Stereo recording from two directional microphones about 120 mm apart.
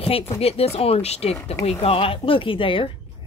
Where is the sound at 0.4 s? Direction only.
55° left (ahead or behind).